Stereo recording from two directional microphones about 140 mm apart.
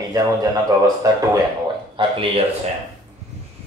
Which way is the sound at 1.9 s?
40° right (ahead or behind).